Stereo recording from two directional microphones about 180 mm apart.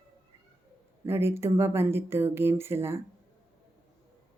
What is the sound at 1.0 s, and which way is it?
Speech, 15° right (ahead or behind).